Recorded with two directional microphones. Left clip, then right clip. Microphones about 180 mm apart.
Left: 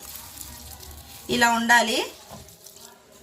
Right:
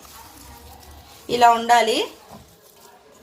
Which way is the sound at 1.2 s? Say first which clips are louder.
Right 5 dB; 30° right (ahead or behind).